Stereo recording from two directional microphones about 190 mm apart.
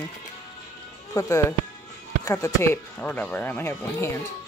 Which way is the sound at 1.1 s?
15° left (ahead or behind).